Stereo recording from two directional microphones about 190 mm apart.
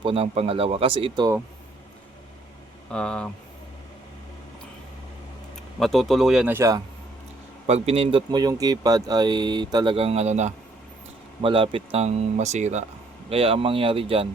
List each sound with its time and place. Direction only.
0.0 s speech: 30° right (ahead or behind)
2.9 s speech: 5° left (ahead or behind)
5.8 s speech: centre (ahead or behind); by 6.8 s 15° right (ahead or behind)
7.7 s speech: 30° right (ahead or behind)